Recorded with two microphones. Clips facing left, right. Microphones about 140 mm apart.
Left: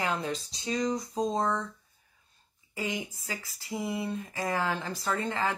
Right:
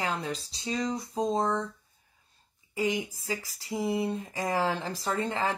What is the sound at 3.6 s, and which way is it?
Speech, 30° right (ahead or behind).